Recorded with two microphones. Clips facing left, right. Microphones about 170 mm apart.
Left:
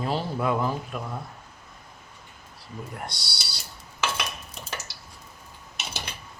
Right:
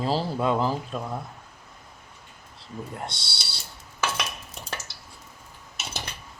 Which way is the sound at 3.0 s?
25° right (ahead or behind).